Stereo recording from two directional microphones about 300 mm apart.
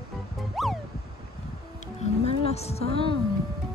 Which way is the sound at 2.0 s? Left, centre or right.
Left.